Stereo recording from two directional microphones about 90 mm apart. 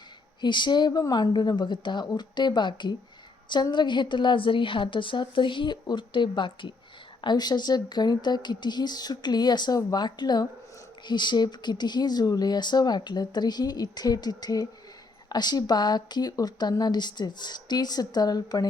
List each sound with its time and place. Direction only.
0.4 s a woman's voice: 60° left (ahead or behind)